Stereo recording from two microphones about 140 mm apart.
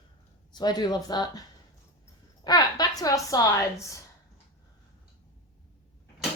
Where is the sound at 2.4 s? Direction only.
30° left (ahead or behind).